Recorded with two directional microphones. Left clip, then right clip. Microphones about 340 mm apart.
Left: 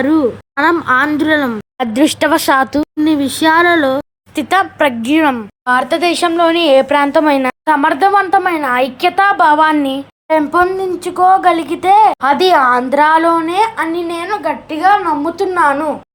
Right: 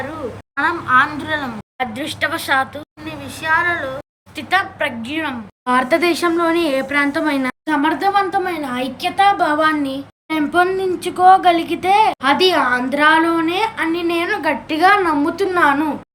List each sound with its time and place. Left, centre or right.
0.5 s speech: centre
5.6 s a woman's voice: centre